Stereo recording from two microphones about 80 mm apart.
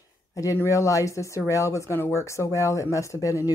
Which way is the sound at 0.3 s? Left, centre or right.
Left.